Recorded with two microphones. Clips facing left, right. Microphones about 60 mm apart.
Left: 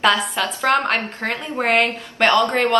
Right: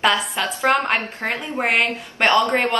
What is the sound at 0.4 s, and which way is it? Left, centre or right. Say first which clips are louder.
A woman's voice: left 1 dB; right.